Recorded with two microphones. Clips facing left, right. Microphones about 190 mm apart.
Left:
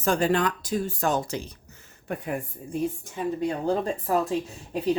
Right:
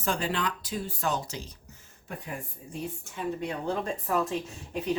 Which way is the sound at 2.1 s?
60° left (ahead or behind).